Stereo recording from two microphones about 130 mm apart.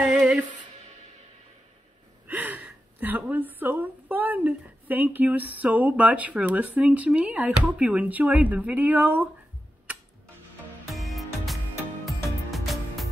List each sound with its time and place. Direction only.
0.0 s music: 5° right (ahead or behind)
2.2 s a sound: 15° right (ahead or behind)
7.7 s speech: 10° right (ahead or behind)
10.9 s music: centre (ahead or behind)